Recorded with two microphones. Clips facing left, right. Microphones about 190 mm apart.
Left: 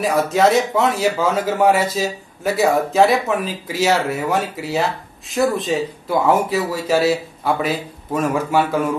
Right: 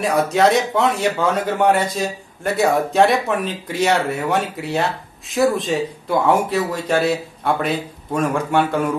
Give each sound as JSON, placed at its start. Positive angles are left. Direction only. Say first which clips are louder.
{"t": 0.0, "sound": "a man's voice", "louder": "even", "side_deg": 0}